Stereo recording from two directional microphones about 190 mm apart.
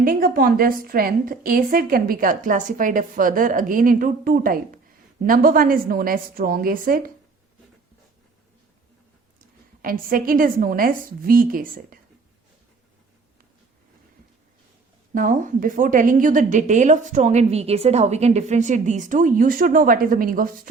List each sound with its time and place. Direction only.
0.0 s a woman's voice: 50° right (ahead or behind)
9.8 s a woman's voice: 50° right (ahead or behind)
15.1 s a woman's voice: 45° right (ahead or behind)